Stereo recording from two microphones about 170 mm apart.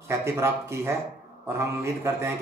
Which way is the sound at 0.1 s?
15° right (ahead or behind).